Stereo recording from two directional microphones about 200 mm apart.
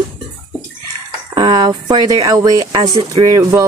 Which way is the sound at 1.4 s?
20° right (ahead or behind).